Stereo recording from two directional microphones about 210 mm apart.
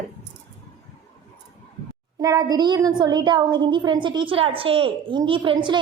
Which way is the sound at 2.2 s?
15° right (ahead or behind).